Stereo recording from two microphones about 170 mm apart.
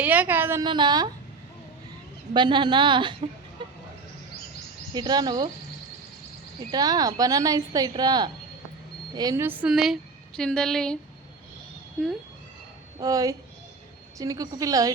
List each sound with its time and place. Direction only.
0.0 s a woman's voice: 10° right (ahead or behind)
0.6 s a woman's voice: 25° right (ahead or behind)
2.3 s a woman's voice: 25° right (ahead or behind)
3.6 s vehicle: 30° right (ahead or behind)
4.9 s a woman's voice: 25° right (ahead or behind)
6.7 s a woman's voice: 25° right (ahead or behind); by 10.9 s 5° left (ahead or behind)
13.0 s a woman's voice: 20° right (ahead or behind)